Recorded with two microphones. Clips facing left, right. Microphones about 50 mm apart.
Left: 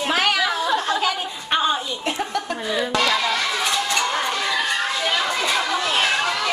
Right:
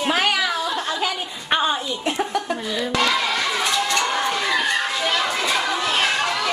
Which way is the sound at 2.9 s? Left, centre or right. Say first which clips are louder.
Right 1 dB; centre.